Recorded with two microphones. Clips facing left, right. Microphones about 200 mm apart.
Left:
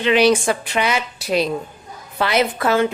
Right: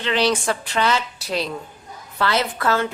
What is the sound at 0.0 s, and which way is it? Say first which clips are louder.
A woman's voice: left 6 dB; 15° left (ahead or behind).